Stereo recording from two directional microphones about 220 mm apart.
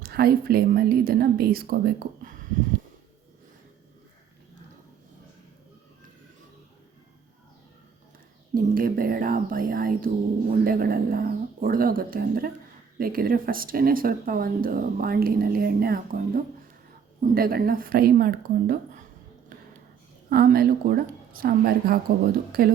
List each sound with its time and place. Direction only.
0.0 s a woman's voice: 45° right (ahead or behind)
8.5 s speech: 40° right (ahead or behind)
20.3 s a woman's voice: 45° right (ahead or behind)